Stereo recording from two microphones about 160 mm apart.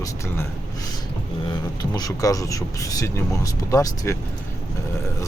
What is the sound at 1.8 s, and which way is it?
Speech, 25° left (ahead or behind).